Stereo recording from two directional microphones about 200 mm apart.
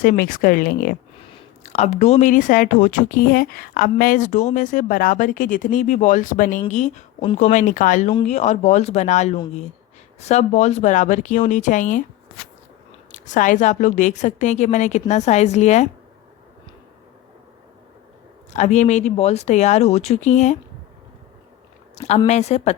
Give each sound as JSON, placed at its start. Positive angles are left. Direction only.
{"t": 0.0, "sound": "speech", "side_deg": 40}
{"t": 1.3, "sound": "speech", "side_deg": 35}
{"t": 13.1, "sound": "speech", "side_deg": 40}
{"t": 18.5, "sound": "speech", "side_deg": 35}
{"t": 22.3, "sound": "speech", "side_deg": 35}